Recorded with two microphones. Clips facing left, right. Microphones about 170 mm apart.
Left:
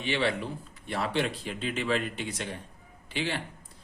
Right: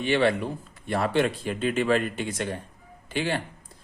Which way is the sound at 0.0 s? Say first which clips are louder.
Right 6 dB; 50° right (ahead or behind).